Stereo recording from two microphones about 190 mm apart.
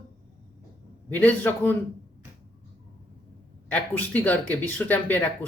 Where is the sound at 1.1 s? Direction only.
10° left (ahead or behind).